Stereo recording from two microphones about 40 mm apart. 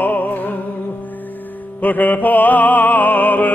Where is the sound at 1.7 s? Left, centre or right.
Left.